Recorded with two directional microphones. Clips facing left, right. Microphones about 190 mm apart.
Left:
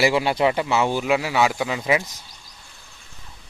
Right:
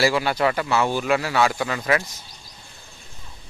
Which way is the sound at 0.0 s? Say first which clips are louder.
Left 1 dB; 25° left (ahead or behind).